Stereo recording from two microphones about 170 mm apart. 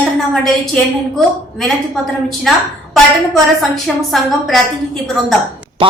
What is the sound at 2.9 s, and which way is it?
A woman's voice, centre (ahead or behind).